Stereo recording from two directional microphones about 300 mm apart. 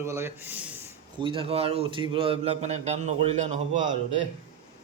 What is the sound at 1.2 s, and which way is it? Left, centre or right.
A man's voice, centre.